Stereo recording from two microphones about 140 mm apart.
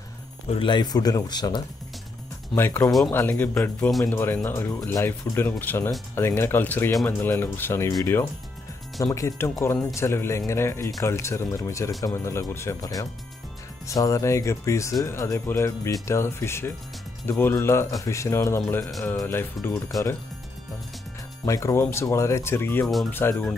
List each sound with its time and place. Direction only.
0.5 s speech: 35° left (ahead or behind)
2.5 s speech: 15° left (ahead or behind)
21.5 s speech: 20° left (ahead or behind)